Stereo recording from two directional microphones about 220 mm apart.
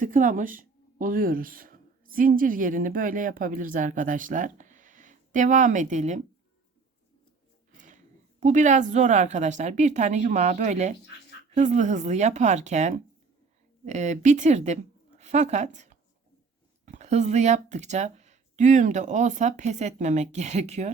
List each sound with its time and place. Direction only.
0.0 s speech: 35° right (ahead or behind)
7.7 s a woman's voice: 35° right (ahead or behind)